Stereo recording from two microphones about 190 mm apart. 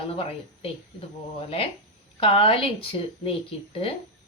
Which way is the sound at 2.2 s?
30° left (ahead or behind).